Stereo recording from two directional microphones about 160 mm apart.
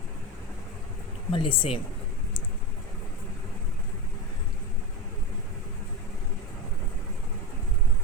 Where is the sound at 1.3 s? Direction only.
35° left (ahead or behind).